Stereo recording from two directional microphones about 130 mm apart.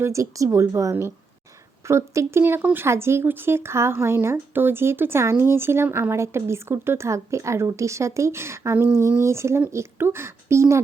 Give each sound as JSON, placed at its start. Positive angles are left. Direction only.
{"t": 0.0, "sound": "speech", "side_deg": -25}